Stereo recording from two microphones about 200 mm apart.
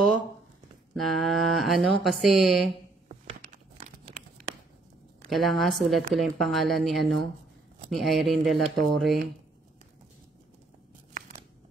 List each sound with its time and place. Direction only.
0.9 s speech: centre (ahead or behind)
3.1 s crumpling: 35° right (ahead or behind)
5.3 s speech: centre (ahead or behind)
11.1 s a sound: 35° right (ahead or behind)